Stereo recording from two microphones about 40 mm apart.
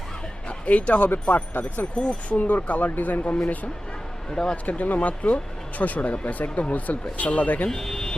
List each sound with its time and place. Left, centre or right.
0.4 s speech: left
2.0 s speech: left
4.3 s speech: left
4.5 s speech: left
7.7 s speech: centre